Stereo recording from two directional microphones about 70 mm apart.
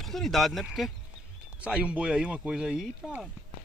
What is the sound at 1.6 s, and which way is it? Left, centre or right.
Speech, centre.